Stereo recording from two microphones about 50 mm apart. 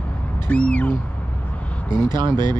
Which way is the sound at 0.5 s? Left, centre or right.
Left.